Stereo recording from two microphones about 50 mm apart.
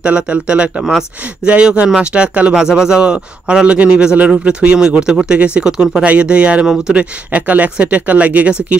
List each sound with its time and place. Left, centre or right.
0.0 s speech: right